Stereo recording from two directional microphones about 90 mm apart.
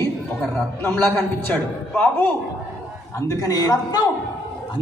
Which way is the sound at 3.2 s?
40° left (ahead or behind).